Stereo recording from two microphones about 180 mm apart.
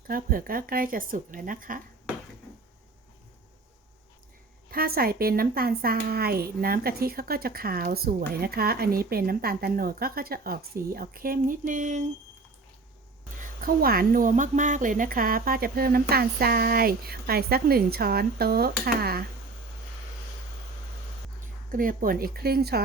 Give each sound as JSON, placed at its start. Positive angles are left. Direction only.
{"t": 0.1, "sound": "speech", "side_deg": -50}
{"t": 4.7, "sound": "speech", "side_deg": -55}
{"t": 13.4, "sound": "speech", "side_deg": -55}
{"t": 21.7, "sound": "speech", "side_deg": -50}